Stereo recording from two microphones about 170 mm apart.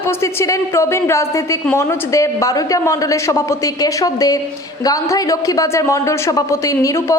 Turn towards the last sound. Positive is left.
turn(degrees=20)  # may be behind; listen again after turning